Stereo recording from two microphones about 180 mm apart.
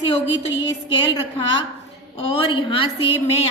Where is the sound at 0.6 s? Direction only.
25° left (ahead or behind).